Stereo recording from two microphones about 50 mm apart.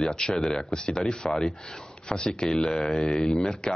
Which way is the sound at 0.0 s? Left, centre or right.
Centre.